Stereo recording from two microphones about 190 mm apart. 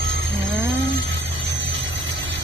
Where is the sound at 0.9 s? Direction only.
65° right (ahead or behind).